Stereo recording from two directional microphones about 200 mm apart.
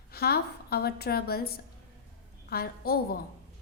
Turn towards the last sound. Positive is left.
turn(degrees=50)  # may be behind; listen again after turning